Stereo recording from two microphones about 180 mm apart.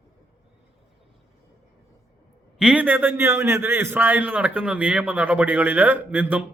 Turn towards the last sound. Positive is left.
turn(degrees=-10)  # may be behind; listen again after turning